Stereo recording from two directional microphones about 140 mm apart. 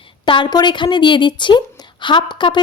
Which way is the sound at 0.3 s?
35° left (ahead or behind).